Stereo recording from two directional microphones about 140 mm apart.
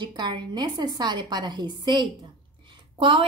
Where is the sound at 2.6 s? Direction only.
35° right (ahead or behind).